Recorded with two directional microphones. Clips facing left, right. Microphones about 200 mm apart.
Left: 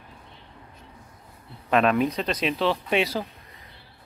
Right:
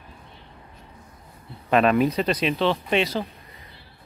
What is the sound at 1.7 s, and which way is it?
Speech, centre (ahead or behind).